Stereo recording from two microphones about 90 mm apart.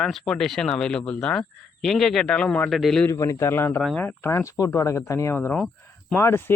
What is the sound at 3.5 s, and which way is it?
Speech, 25° left (ahead or behind).